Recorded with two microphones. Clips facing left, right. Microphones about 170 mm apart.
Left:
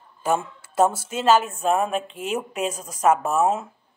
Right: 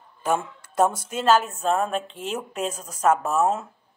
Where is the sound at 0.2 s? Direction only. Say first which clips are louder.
Left 1 dB; 5° left (ahead or behind).